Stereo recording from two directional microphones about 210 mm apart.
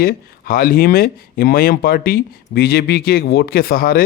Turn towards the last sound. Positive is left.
turn(degrees=45)  # may be behind; listen again after turning